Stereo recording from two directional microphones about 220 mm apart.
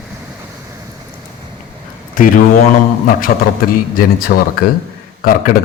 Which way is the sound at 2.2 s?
40° left (ahead or behind).